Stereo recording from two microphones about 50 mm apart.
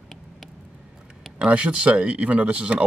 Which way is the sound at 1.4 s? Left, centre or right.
Right.